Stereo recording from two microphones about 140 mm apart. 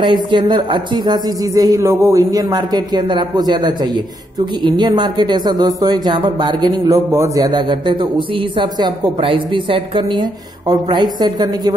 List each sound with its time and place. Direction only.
0.0 s speech: 35° right (ahead or behind)